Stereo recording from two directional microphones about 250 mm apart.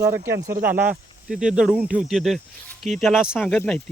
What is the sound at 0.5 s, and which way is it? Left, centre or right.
Speech, right.